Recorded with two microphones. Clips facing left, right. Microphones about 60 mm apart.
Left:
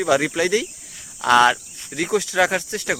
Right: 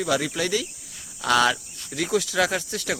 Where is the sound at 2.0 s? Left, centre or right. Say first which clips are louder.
Left 4 dB; left.